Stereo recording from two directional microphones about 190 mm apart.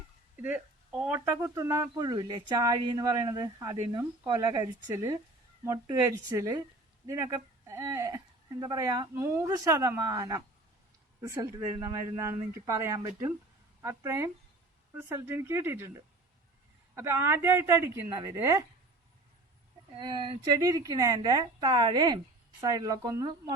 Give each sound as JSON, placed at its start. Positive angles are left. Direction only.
{"t": 0.3, "sound": "speech", "side_deg": -10}
{"t": 16.9, "sound": "speech", "side_deg": -15}
{"t": 20.0, "sound": "speech", "side_deg": -25}